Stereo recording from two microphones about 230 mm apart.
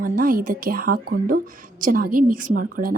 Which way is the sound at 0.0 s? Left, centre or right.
Right.